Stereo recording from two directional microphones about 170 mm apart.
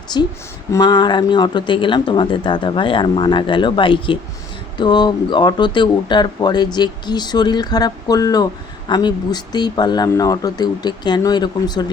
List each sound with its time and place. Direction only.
0.1 s speech: 25° left (ahead or behind)